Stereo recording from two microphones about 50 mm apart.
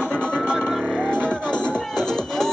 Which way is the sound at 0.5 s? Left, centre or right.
Centre.